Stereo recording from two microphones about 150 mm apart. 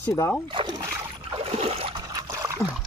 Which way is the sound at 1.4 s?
45° right (ahead or behind).